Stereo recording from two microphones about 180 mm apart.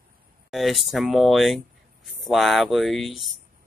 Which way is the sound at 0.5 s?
Centre (ahead or behind).